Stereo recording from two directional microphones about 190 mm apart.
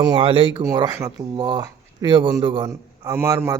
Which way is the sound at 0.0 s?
25° right (ahead or behind).